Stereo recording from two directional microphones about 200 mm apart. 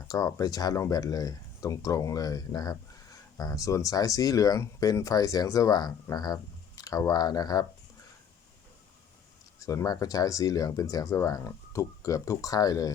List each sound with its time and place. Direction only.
0.1 s speech: 15° left (ahead or behind)
9.6 s speech: 15° left (ahead or behind)